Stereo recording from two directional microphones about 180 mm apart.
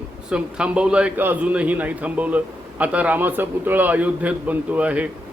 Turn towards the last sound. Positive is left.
turn(degrees=-10)  # may be behind; listen again after turning